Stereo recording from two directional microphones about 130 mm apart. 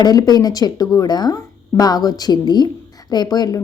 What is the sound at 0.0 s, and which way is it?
A woman's voice, 30° left (ahead or behind).